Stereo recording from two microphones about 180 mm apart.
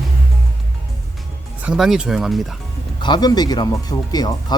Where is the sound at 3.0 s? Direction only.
25° left (ahead or behind).